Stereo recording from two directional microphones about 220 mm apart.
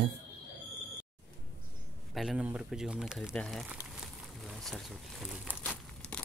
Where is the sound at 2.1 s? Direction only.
Centre (ahead or behind).